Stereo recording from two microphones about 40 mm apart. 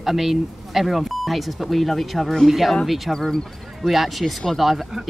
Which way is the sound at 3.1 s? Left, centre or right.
Centre.